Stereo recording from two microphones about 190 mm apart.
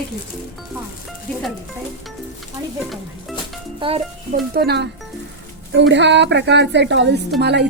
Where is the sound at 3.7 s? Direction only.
30° right (ahead or behind).